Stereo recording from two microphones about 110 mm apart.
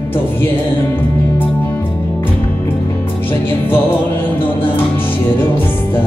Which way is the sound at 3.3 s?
20° left (ahead or behind).